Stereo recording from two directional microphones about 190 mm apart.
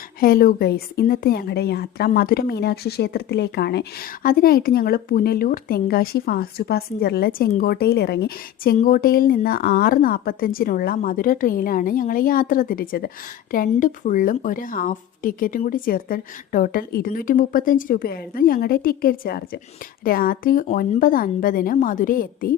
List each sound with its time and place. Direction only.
0.2 s a woman's voice: 50° left (ahead or behind)
8.8 s speech: 50° left (ahead or behind)